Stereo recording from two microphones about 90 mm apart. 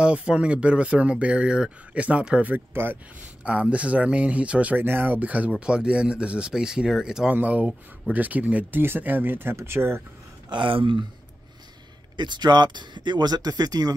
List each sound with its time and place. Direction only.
0.0 s speech: 10° right (ahead or behind)
7.3 s speech: 15° right (ahead or behind)
10.5 s speech: 70° right (ahead or behind)
12.2 s speech: 55° right (ahead or behind)